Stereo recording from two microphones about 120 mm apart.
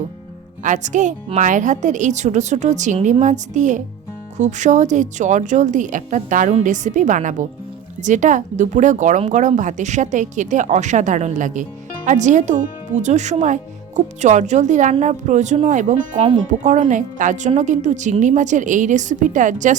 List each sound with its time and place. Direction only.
0.6 s a woman's voice: 90° right
13.0 s a woman's voice: 75° right (ahead or behind)